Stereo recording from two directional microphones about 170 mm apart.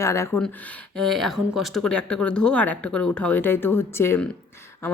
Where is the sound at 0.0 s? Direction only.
15° left (ahead or behind).